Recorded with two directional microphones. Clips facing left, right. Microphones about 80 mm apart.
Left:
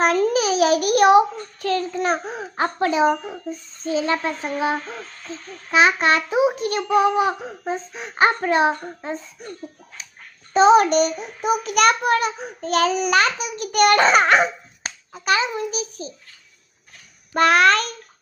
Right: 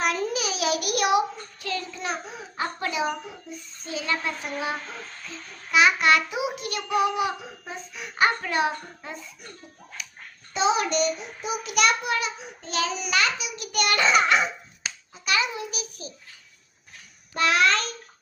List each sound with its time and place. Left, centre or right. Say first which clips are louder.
0.0 s a sound: left 8 dB; left
1.6 s child singing: left 9 dB; left
2.8 s a child's voice: left 11 dB; left
10.0 s a sound: right 1 dB; left
10.5 s child singing: left 10 dB; left
15.4 s a child's voice: left 5 dB; left
17.3 s child singing: left 6 dB; left